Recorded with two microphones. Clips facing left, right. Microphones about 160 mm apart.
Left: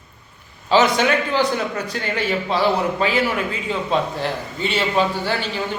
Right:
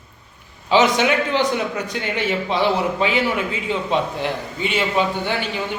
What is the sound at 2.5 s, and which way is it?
A man's voice, 20° right (ahead or behind).